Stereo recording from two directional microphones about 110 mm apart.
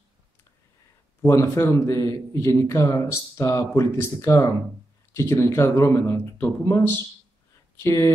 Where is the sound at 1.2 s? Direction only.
25° left (ahead or behind).